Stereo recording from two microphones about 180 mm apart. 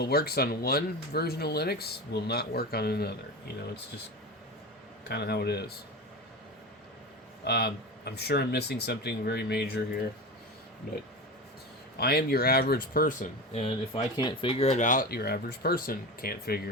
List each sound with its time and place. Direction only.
0.0 s speech: 60° left (ahead or behind)
5.0 s speech: 65° left (ahead or behind)
7.4 s speech: 65° left (ahead or behind)
11.9 s speech: 60° left (ahead or behind)